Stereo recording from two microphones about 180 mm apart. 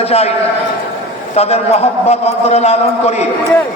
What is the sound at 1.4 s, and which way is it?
A man's voice, 35° left (ahead or behind).